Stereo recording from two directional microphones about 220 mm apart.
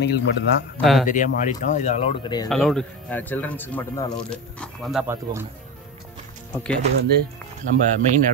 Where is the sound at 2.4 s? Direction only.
Centre (ahead or behind).